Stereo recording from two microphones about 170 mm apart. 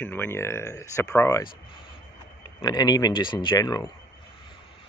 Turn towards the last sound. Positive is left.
turn(degrees=20)  # may be behind; listen again after turning